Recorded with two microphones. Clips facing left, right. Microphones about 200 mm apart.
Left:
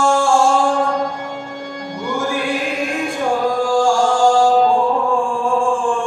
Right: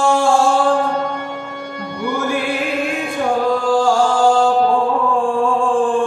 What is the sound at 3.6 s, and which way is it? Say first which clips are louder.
Music: left 1 dB; 60° right (ahead or behind).